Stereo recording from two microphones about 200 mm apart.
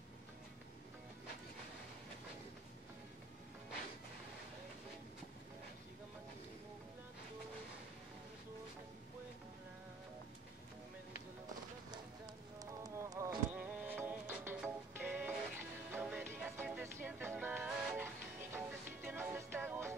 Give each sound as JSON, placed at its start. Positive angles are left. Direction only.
{"t": 12.5, "sound": "music", "side_deg": -15}